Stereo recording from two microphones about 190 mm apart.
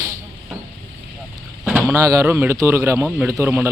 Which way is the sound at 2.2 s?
10° right (ahead or behind).